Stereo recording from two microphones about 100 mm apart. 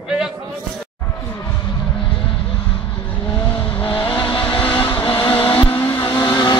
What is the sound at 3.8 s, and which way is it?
Vehicle, 60° left (ahead or behind).